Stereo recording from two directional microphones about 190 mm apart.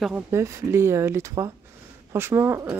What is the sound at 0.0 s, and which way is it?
Speech, 10° right (ahead or behind).